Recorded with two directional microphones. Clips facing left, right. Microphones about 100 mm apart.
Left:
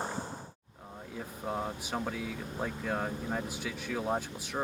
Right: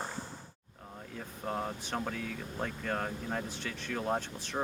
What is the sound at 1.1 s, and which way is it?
Speech, 5° left (ahead or behind).